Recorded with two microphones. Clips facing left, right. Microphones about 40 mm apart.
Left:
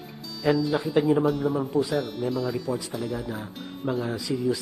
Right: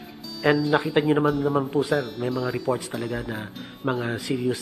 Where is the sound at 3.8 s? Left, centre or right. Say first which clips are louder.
Right 2 dB; right.